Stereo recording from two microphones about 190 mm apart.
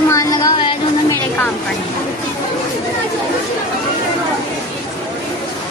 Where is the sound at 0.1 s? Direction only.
20° left (ahead or behind).